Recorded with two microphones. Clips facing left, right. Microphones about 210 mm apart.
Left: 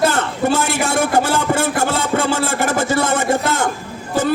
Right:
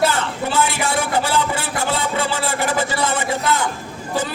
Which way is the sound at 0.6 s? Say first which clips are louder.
Left 4 dB; 45° left (ahead or behind).